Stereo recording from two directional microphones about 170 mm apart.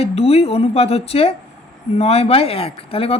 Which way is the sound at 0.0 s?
35° left (ahead or behind).